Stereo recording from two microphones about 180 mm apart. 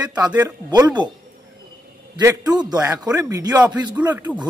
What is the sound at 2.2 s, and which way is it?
Speech, 20° right (ahead or behind).